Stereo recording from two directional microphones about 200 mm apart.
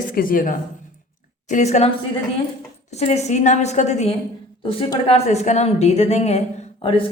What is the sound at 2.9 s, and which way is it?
A woman's voice, 30° left (ahead or behind).